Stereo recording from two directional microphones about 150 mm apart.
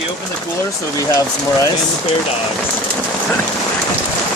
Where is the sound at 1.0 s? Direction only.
20° left (ahead or behind).